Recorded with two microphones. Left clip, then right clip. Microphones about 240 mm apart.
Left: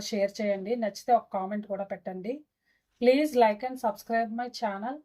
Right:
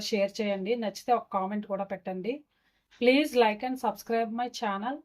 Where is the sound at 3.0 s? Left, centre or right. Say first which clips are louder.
Left 1 dB; right.